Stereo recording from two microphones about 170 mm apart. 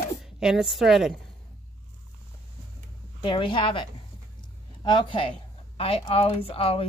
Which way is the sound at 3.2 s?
30° left (ahead or behind).